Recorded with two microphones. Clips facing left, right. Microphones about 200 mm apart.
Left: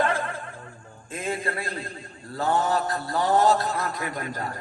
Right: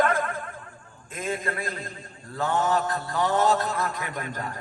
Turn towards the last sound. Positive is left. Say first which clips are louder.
# left 2 dB
turn(degrees=35)  # may be behind; listen again after turning